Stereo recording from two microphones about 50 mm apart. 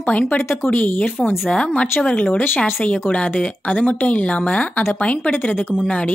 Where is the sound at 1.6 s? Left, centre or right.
Left.